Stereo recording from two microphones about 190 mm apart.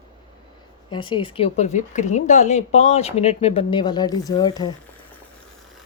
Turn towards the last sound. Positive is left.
turn(degrees=20)  # may be behind; listen again after turning